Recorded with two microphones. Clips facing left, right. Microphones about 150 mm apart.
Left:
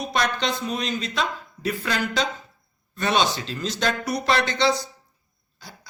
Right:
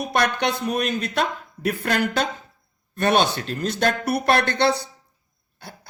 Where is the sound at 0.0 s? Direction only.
60° right (ahead or behind).